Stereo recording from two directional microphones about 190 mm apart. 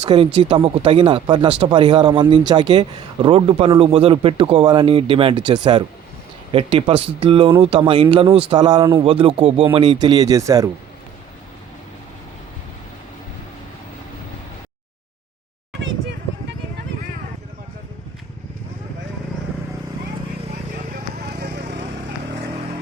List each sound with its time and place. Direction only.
0.0 s a man's voice: 25° right (ahead or behind)
20.9 s run: 55° right (ahead or behind)